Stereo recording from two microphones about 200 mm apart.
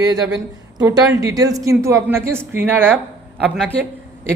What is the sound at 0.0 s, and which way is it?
Speech, 20° right (ahead or behind).